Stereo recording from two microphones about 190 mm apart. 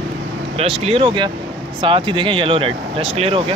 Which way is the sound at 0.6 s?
30° right (ahead or behind).